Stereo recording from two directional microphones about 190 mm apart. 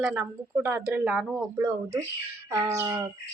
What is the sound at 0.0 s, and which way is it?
A woman's voice, 10° right (ahead or behind).